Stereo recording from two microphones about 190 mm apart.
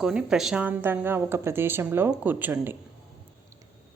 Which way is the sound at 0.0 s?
5° right (ahead or behind).